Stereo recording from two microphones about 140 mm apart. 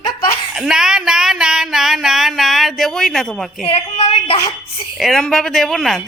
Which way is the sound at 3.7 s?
45° left (ahead or behind).